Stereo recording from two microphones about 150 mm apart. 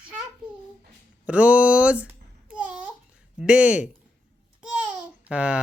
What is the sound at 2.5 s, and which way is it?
Babbling, 10° right (ahead or behind).